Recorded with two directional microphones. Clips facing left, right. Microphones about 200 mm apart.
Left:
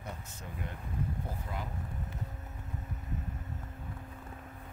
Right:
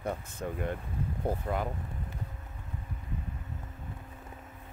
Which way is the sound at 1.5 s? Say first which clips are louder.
Right 9 dB; 65° right (ahead or behind).